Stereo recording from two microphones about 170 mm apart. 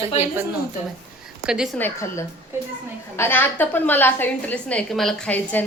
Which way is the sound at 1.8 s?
15° left (ahead or behind).